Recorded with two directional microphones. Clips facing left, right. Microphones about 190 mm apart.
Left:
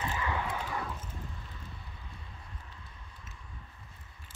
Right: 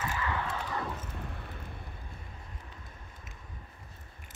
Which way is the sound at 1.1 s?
65° right (ahead or behind).